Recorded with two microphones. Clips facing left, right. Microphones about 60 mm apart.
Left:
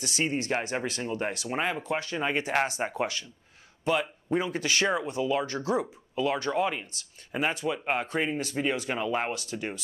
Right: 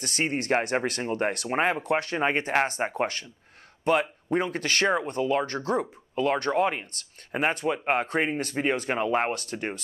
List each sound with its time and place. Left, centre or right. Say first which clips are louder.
0.0 s speech: right 1 dB; right
1.5 s speech: right 5 dB; right
1.8 s speech: right 4 dB; right
9.3 s speech: right 2 dB; right